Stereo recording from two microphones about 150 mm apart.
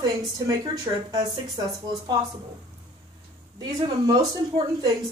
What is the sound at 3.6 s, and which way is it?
Speech, 25° right (ahead or behind).